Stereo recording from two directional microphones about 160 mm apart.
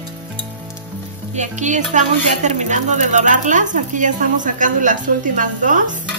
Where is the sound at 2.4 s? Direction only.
50° right (ahead or behind).